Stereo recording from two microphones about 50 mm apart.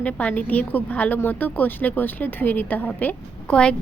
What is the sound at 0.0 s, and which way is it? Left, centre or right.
A woman's voice, left.